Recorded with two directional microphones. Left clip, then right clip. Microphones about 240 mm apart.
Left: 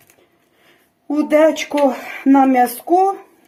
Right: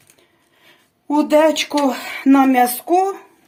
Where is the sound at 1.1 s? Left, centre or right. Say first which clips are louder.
Even; centre.